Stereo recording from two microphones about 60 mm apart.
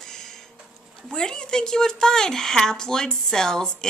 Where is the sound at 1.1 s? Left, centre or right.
Centre.